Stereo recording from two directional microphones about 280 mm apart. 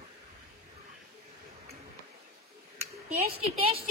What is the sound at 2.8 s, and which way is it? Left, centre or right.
Speech, right.